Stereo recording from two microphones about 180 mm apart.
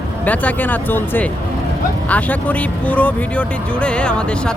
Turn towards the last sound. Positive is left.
turn(degrees=5)  # may be behind; listen again after turning